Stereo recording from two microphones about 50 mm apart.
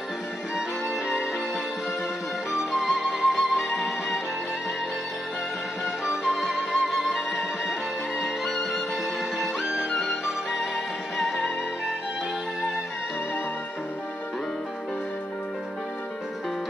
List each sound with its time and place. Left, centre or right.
0.6 s music: centre
2.5 s music: centre
6.0 s music: centre